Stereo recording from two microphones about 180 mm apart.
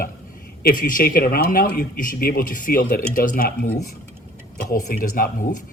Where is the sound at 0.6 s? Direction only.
50° left (ahead or behind).